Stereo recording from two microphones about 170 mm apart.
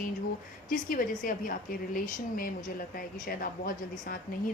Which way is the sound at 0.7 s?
55° left (ahead or behind).